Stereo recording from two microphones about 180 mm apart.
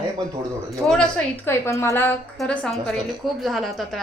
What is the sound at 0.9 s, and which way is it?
A woman's voice, 5° left (ahead or behind).